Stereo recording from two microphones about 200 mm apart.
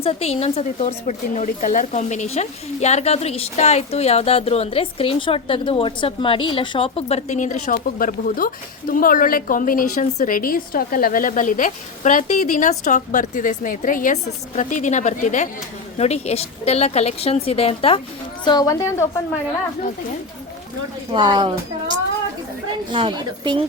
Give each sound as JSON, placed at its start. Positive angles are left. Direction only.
{"t": 0.0, "sound": "a woman's voice", "side_deg": 30}
{"t": 21.1, "sound": "speech", "side_deg": -25}
{"t": 22.9, "sound": "speech", "side_deg": -25}